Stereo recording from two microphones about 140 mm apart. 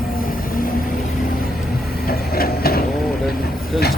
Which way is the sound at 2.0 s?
90° left.